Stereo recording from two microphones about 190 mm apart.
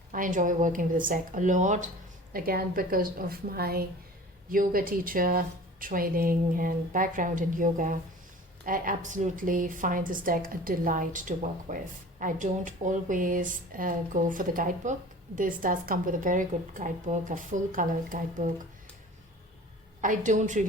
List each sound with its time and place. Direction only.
0.1 s speech: 45° right (ahead or behind)
20.0 s a woman's voice: 40° right (ahead or behind)